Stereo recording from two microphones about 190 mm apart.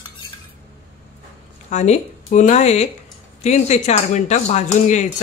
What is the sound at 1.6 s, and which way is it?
Speech, 35° left (ahead or behind).